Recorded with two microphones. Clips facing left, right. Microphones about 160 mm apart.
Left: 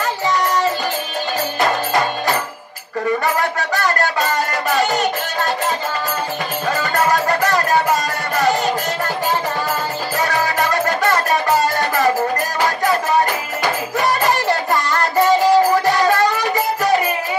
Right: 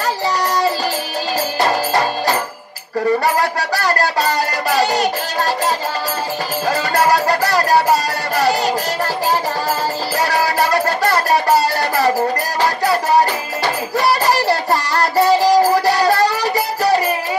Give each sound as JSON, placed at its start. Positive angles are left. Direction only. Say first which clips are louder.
{"t": 1.6, "sound": "music", "louder": "right 1 dB", "side_deg": -35}
{"t": 6.7, "sound": "music", "louder": "right 2 dB", "side_deg": -35}
{"t": 10.1, "sound": "music", "louder": "right 1 dB", "side_deg": -35}